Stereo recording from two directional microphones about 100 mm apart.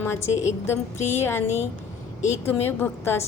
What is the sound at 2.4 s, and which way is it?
Speech, 25° left (ahead or behind).